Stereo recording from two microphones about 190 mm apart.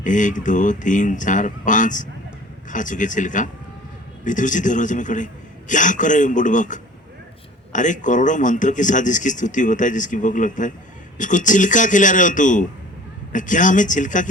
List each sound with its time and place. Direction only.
0.0 s speech: 40° left (ahead or behind)